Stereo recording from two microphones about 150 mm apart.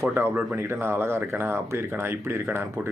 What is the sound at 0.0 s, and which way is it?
Speech, 15° right (ahead or behind).